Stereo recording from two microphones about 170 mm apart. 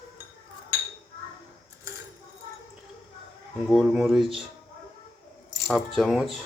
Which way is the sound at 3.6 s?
Centre (ahead or behind).